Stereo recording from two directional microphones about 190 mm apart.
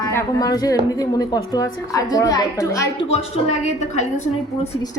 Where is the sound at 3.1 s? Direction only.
35° left (ahead or behind).